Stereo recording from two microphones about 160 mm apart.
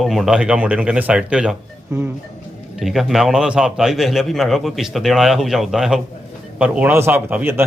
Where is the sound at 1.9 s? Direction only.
15° right (ahead or behind).